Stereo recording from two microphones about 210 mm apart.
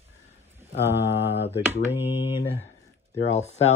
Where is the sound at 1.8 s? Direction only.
10° right (ahead or behind).